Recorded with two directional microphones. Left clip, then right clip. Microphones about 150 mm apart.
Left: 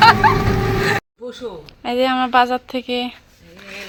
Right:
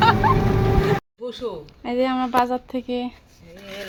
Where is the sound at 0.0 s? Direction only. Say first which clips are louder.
Left 6 dB; 5° left (ahead or behind).